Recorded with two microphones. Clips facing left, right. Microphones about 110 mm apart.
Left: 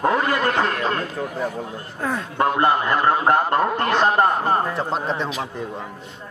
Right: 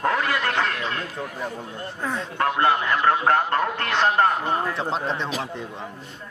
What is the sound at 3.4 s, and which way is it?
Speech, 15° left (ahead or behind).